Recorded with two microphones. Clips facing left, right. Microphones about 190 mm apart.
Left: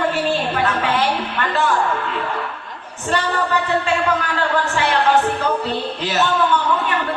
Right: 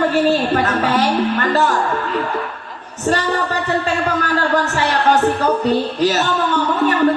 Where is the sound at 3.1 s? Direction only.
40° right (ahead or behind).